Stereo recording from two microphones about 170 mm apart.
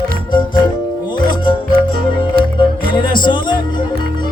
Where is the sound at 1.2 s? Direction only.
25° left (ahead or behind).